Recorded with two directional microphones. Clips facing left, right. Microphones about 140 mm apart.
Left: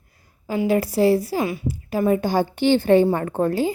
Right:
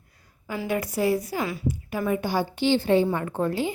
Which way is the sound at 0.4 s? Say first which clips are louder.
Left 7 dB; 30° left (ahead or behind).